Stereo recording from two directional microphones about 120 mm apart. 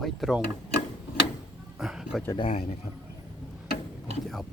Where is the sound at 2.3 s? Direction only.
50° left (ahead or behind).